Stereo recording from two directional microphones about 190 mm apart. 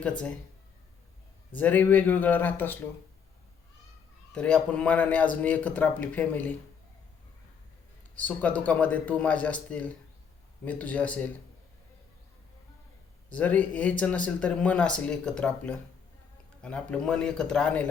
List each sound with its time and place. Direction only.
1.5 s speech: 10° left (ahead or behind)
4.4 s speech: 5° left (ahead or behind)
8.1 s speech: 5° left (ahead or behind)
13.3 s a man's voice: 10° left (ahead or behind)